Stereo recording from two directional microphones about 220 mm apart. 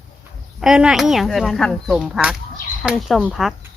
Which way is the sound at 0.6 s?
Centre (ahead or behind).